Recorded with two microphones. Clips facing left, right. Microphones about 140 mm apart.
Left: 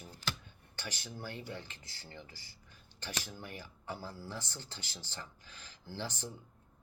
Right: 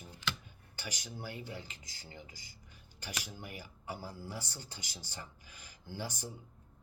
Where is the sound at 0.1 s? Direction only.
40° left (ahead or behind).